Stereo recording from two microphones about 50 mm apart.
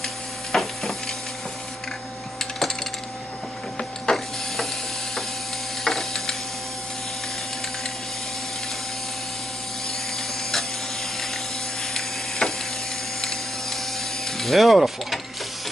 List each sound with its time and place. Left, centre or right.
0.0 s printer: centre
2.3 s coin: centre
3.7 s printer: centre
5.9 s printer: centre
11.9 s sizzle: centre
13.2 s printer: centre
14.2 s mechanisms: centre